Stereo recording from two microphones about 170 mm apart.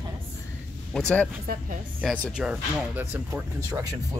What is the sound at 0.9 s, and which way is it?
Speech, 5° left (ahead or behind).